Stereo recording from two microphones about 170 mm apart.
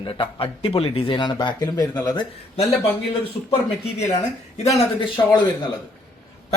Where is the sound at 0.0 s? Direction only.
30° left (ahead or behind).